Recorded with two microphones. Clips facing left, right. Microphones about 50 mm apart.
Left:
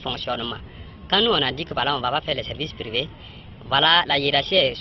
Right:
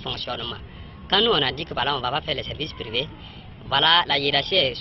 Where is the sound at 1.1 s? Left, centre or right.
Centre.